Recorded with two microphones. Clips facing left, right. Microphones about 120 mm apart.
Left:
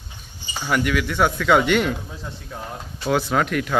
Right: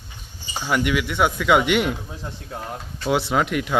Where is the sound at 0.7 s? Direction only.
20° right (ahead or behind).